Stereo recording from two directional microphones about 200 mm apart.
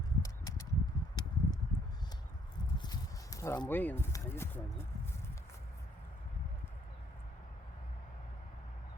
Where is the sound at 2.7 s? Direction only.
20° left (ahead or behind).